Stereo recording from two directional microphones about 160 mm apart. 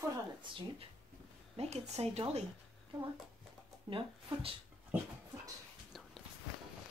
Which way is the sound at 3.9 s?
35° right (ahead or behind).